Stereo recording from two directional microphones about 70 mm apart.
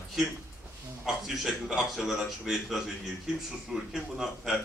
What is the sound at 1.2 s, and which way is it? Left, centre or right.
Speech, centre.